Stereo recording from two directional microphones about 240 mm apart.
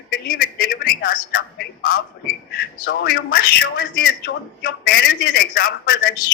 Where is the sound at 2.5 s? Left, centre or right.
Left.